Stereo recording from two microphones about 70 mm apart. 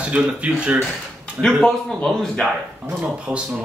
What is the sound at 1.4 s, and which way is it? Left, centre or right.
Speech, centre.